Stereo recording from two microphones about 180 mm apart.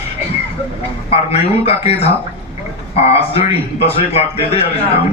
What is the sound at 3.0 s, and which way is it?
A man's voice, 35° left (ahead or behind).